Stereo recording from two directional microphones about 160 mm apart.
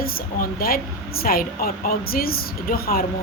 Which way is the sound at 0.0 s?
65° left (ahead or behind).